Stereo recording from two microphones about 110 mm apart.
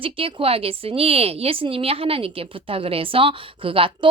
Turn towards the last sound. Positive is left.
turn(degrees=-50)  # may be behind; listen again after turning